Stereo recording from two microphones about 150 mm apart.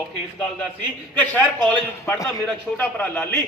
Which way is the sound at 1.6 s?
10° left (ahead or behind).